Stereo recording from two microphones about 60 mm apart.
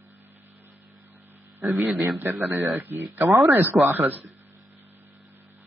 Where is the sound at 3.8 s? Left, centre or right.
Right.